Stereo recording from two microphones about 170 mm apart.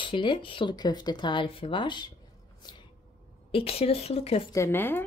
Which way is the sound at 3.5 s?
35° left (ahead or behind).